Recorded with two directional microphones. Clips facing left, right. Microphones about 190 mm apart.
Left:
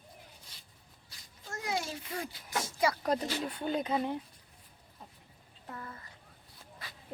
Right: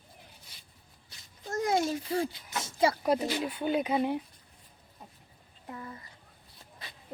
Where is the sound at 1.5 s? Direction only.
45° right (ahead or behind); by 2.9 s 25° right (ahead or behind).